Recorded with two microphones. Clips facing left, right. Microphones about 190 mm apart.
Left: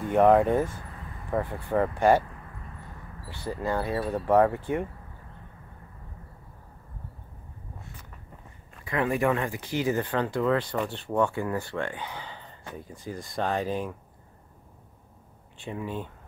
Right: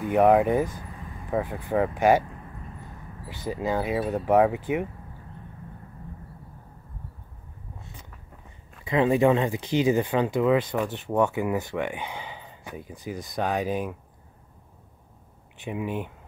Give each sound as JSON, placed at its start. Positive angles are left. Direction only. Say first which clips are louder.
{"t": 0.0, "sound": "speech", "louder": "right 1 dB", "side_deg": -5}
{"t": 3.4, "sound": "speech", "louder": "right 2 dB", "side_deg": -15}
{"t": 8.8, "sound": "speech", "louder": "right 5 dB", "side_deg": -20}
{"t": 15.6, "sound": "speech", "louder": "right 3 dB", "side_deg": -15}